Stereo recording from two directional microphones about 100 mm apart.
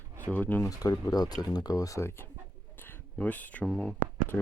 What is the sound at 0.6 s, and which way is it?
Speech, 35° left (ahead or behind).